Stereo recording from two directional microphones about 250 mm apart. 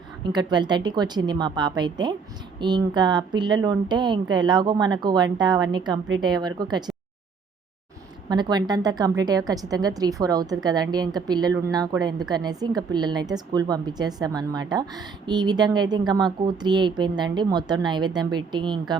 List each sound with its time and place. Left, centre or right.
0.3 s a woman's voice: centre
8.3 s a woman's voice: centre